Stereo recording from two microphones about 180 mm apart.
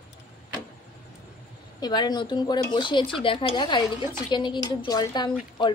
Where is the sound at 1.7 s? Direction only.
20° left (ahead or behind).